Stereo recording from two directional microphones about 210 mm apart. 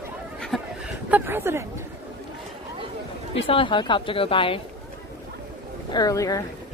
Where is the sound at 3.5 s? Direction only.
25° left (ahead or behind).